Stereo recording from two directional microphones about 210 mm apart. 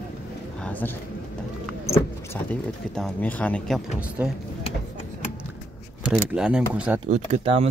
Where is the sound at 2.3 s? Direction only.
10° left (ahead or behind).